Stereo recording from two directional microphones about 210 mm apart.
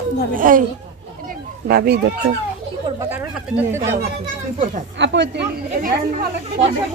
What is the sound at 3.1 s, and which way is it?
Speech, 10° right (ahead or behind).